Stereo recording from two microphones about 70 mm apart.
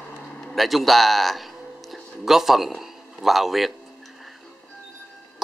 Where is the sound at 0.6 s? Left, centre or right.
Centre.